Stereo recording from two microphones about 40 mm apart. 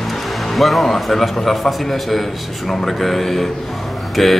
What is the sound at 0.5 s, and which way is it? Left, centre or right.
Speech, centre.